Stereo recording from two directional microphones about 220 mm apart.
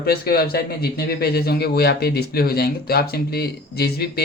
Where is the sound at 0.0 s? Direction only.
45° left (ahead or behind).